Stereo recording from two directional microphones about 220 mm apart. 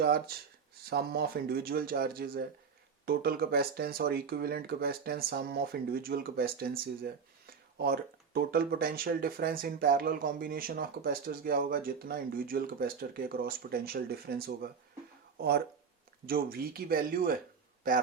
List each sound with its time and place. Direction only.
0.0 s speech: 45° right (ahead or behind)